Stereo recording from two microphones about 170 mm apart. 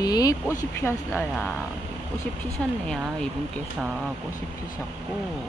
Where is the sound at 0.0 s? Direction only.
20° left (ahead or behind).